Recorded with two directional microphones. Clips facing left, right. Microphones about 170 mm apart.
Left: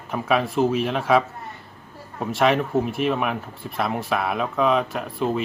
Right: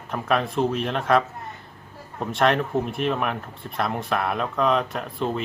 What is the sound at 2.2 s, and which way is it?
Speech, centre (ahead or behind).